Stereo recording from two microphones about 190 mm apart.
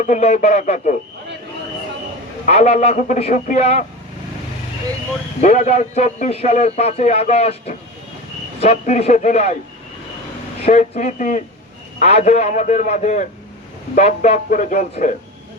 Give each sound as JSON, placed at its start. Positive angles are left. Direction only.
{"t": 0.0, "sound": "a man's voice", "side_deg": 40}
{"t": 2.5, "sound": "a man's voice", "side_deg": 35}
{"t": 5.4, "sound": "a man's voice", "side_deg": 35}
{"t": 10.7, "sound": "a man's voice", "side_deg": 40}